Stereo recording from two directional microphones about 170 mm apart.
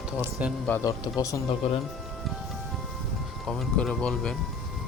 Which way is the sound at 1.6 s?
40° left (ahead or behind).